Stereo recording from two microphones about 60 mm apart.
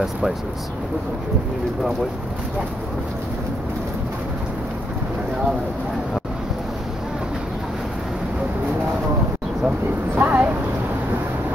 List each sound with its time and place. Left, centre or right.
10.1 s speech: right